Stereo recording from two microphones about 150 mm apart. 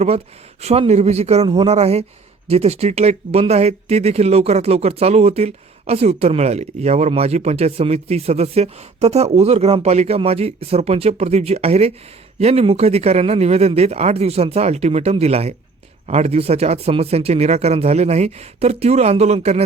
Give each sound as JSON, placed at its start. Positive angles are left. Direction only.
{"t": 0.6, "sound": "speech", "side_deg": -45}